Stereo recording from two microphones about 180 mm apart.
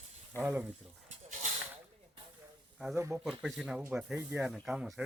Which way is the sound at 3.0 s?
15° right (ahead or behind).